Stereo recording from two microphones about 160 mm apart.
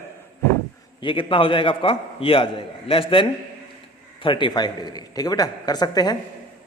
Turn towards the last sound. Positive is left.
turn(degrees=25)  # may be behind; listen again after turning